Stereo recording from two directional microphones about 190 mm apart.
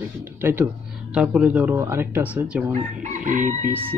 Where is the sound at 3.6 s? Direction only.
10° right (ahead or behind).